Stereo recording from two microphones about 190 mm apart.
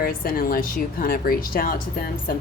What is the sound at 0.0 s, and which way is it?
Speech, 50° left (ahead or behind).